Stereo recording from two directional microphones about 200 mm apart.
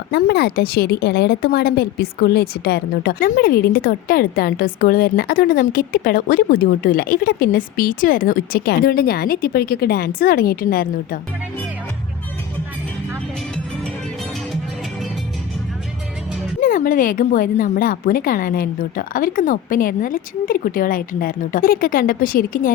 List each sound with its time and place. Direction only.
0.1 s a woman's voice: 50° left (ahead or behind)
16.6 s a woman's voice: 45° left (ahead or behind)